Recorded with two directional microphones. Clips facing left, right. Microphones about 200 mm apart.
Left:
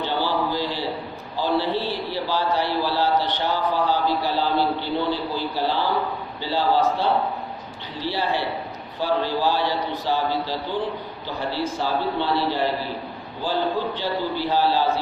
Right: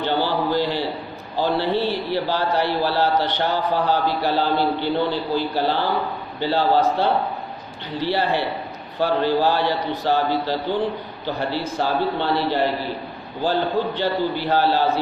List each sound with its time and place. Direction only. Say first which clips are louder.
0.0 s a sound: right 2 dB; 60° right (ahead or behind)
1.4 s a man's voice: right 2 dB; 60° right (ahead or behind)
11.8 s a man's voice: right 4 dB; 60° right (ahead or behind)